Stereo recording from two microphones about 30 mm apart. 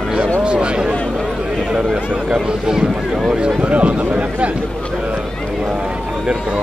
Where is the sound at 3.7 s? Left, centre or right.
Right.